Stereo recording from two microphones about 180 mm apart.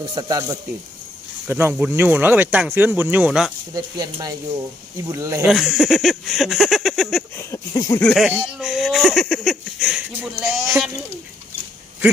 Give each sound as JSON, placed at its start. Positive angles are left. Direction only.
{"t": 0.1, "sound": "speech", "side_deg": -20}
{"t": 3.8, "sound": "speech", "side_deg": -20}
{"t": 5.5, "sound": "speech", "side_deg": 0}
{"t": 7.3, "sound": "a sound", "side_deg": 20}
{"t": 8.0, "sound": "speech", "side_deg": 0}